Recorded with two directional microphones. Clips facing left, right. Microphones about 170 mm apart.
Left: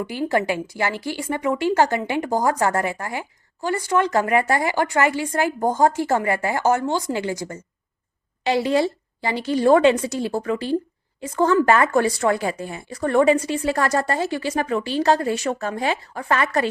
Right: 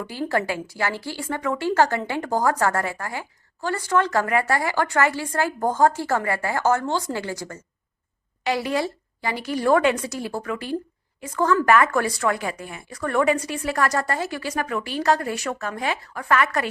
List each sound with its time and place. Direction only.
0.0 s speech: 15° left (ahead or behind)